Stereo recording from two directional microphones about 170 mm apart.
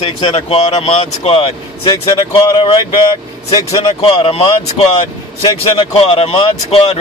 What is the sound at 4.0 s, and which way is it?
Speech, 35° left (ahead or behind).